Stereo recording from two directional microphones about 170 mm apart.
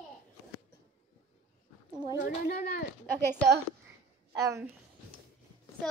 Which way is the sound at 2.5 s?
65° left (ahead or behind).